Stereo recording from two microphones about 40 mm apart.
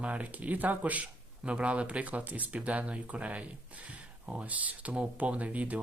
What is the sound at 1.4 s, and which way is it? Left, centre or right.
Speech, right.